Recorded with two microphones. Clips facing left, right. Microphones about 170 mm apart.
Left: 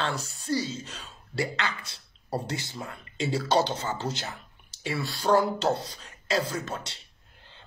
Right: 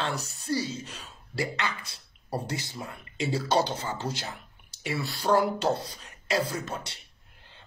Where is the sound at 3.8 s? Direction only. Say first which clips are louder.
Left 1 dB; 25° left (ahead or behind).